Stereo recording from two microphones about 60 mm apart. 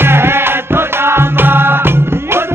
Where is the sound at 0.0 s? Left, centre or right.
Right.